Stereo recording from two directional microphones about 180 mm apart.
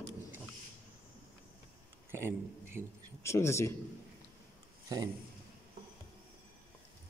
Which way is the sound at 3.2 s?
15° left (ahead or behind).